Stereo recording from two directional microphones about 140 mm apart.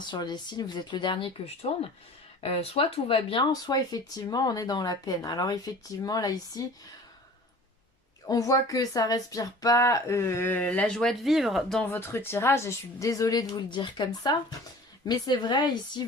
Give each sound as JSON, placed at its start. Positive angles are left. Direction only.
{"t": 0.0, "sound": "speech", "side_deg": 30}
{"t": 2.4, "sound": "speech", "side_deg": 45}
{"t": 3.5, "sound": "speech", "side_deg": 25}
{"t": 8.3, "sound": "speech", "side_deg": 25}
{"t": 11.9, "sound": "speech", "side_deg": 15}